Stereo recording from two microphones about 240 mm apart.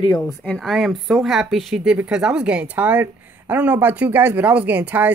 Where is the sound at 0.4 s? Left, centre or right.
Centre.